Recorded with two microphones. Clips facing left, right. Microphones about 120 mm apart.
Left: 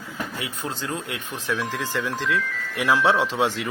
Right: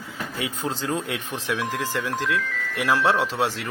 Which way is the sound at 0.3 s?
25° right (ahead or behind).